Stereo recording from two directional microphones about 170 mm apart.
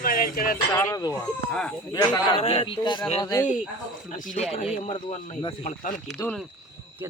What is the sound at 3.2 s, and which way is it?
Speech, 20° left (ahead or behind).